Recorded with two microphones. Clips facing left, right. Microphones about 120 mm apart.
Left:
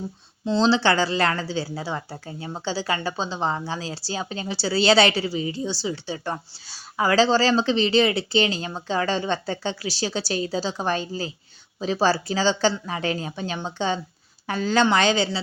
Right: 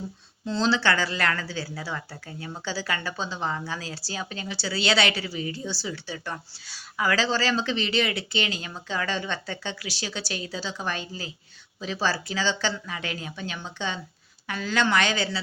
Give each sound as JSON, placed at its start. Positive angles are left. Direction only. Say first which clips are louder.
{"t": 0.4, "sound": "a woman's voice", "louder": "left 5 dB", "side_deg": 25}